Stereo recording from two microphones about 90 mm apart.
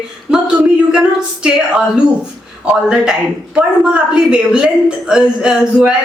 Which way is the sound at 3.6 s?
10° right (ahead or behind).